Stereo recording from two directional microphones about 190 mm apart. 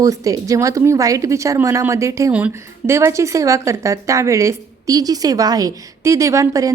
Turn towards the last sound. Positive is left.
turn(degrees=-15)  # may be behind; listen again after turning